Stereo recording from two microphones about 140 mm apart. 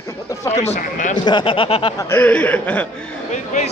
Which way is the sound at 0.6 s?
60° left (ahead or behind).